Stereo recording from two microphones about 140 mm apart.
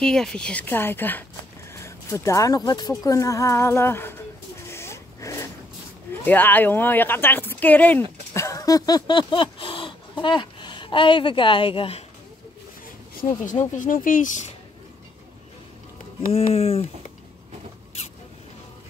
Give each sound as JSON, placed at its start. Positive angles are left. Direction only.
{"t": 0.0, "sound": "speech", "side_deg": 5}
{"t": 4.6, "sound": "a sound", "side_deg": 20}
{"t": 6.2, "sound": "speech", "side_deg": 15}
{"t": 8.3, "sound": "a sound", "side_deg": 20}
{"t": 13.5, "sound": "speech", "side_deg": 65}
{"t": 16.3, "sound": "speech", "side_deg": 45}